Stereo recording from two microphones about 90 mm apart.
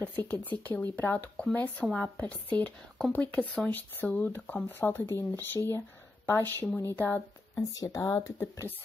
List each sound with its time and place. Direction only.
0.0 s speech: 20° left (ahead or behind)
7.6 s speech: 45° left (ahead or behind)
8.4 s speech: 25° left (ahead or behind)